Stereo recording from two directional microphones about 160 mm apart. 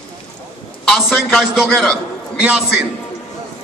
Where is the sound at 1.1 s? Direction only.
5° right (ahead or behind).